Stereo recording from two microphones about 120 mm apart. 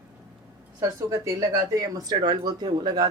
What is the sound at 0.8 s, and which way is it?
Speech, 25° right (ahead or behind).